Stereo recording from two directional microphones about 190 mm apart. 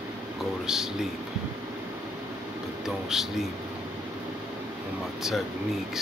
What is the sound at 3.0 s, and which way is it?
Speech, centre (ahead or behind).